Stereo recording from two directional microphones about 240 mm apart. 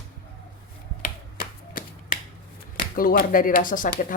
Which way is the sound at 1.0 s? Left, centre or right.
Left.